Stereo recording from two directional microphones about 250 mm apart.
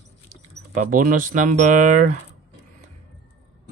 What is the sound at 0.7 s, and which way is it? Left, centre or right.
Speech, right.